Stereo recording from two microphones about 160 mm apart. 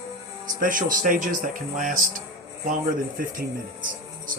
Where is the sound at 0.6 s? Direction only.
60° right (ahead or behind).